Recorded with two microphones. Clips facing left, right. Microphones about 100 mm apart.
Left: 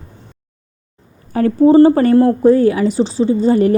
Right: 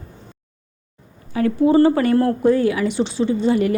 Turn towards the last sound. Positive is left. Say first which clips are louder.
# left 5 dB
turn(degrees=40)  # may be behind; listen again after turning